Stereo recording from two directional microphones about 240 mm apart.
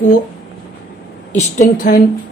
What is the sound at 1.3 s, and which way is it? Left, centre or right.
Speech, left.